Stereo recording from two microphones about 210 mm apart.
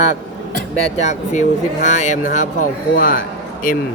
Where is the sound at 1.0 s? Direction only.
35° left (ahead or behind).